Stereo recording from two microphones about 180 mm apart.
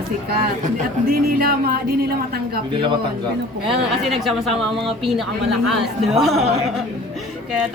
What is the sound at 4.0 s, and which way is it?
Speech, centre (ahead or behind).